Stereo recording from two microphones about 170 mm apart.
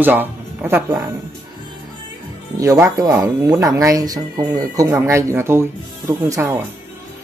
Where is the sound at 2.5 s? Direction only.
20° right (ahead or behind).